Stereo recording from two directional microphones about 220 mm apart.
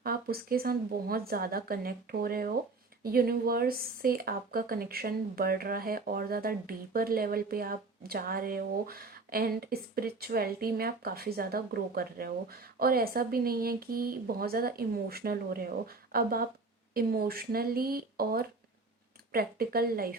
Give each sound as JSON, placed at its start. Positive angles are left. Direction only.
{"t": 0.0, "sound": "a woman's voice", "side_deg": -45}